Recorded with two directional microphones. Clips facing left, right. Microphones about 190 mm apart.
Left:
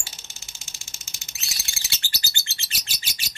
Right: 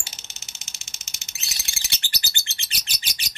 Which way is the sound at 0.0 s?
20° right (ahead or behind).